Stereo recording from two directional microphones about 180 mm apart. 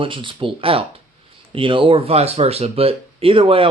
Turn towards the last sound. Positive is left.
turn(degrees=-30)  # may be behind; listen again after turning